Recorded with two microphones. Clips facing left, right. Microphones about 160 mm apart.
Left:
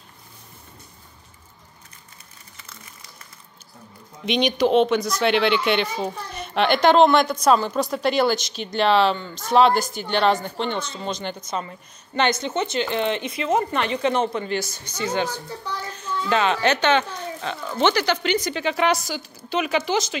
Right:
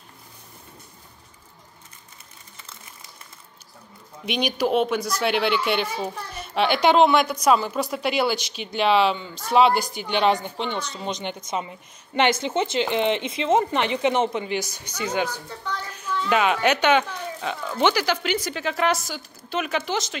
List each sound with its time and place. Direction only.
4.3 s speech: 10° right (ahead or behind)
16.3 s a woman's voice: 10° right (ahead or behind)